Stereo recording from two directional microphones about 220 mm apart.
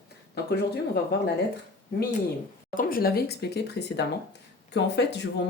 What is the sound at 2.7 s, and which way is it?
Speech, 40° left (ahead or behind).